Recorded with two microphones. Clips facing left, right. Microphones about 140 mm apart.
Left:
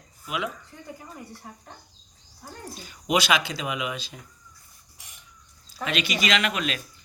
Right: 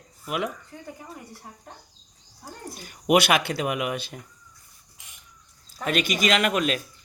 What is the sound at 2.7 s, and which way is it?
Speech, 55° right (ahead or behind).